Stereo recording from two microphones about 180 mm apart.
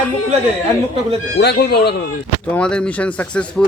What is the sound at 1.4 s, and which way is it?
Speech, 65° left (ahead or behind).